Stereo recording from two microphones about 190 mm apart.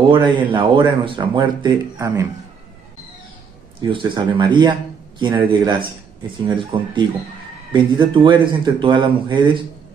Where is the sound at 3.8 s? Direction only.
25° right (ahead or behind).